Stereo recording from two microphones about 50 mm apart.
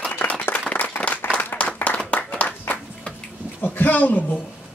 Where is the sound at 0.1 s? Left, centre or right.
Left.